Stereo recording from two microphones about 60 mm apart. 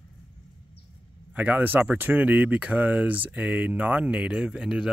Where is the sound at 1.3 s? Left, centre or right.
Right.